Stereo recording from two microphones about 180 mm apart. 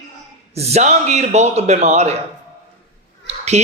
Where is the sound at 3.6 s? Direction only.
40° right (ahead or behind).